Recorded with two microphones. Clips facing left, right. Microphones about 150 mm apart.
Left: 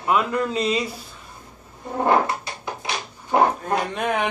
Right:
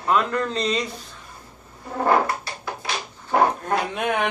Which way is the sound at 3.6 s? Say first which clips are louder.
Even; centre (ahead or behind).